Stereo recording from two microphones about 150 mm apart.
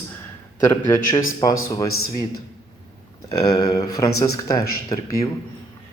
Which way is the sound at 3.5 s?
25° left (ahead or behind).